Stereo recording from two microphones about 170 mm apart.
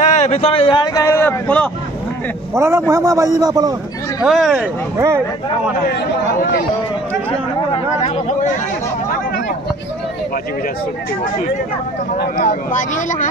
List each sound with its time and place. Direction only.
0.0 s speech: 40° left (ahead or behind); by 1.7 s 10° left (ahead or behind)
2.5 s a man's voice: 15° right (ahead or behind)
4.2 s speech: centre (ahead or behind)
4.9 s a man's voice: 15° right (ahead or behind)
7.2 s chatter: 35° left (ahead or behind)
12.4 s speech: 45° left (ahead or behind)